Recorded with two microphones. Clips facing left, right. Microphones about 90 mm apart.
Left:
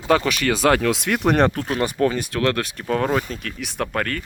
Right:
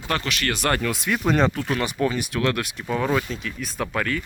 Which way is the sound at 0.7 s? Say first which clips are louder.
Left 5 dB; 90° left.